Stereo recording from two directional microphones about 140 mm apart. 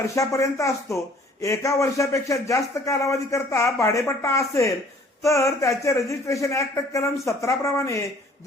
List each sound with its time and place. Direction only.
0.1 s speech: 20° left (ahead or behind)